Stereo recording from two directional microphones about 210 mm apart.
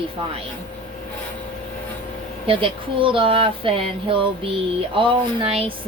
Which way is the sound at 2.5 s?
25° right (ahead or behind).